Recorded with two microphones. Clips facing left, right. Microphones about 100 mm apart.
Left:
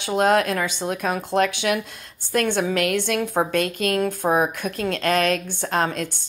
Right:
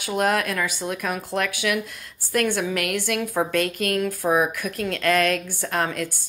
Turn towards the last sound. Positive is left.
turn(degrees=25)  # may be behind; listen again after turning